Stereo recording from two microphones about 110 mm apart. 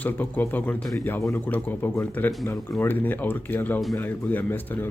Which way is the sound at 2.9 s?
15° left (ahead or behind).